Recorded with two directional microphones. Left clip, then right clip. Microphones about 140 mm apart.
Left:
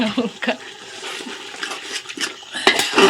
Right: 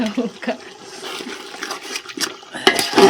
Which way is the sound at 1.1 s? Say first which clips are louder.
Right 1 dB; 30° right (ahead or behind).